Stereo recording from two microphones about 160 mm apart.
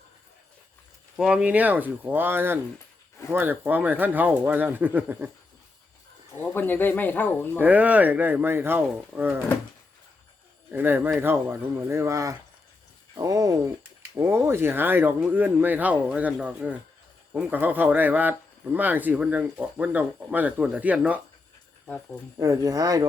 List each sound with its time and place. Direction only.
1.1 s speech: 5° right (ahead or behind)
6.5 s speech: 10° left (ahead or behind)
7.6 s speech: 10° right (ahead or behind)
10.7 s speech: 10° right (ahead or behind)
22.4 s speech: 20° right (ahead or behind)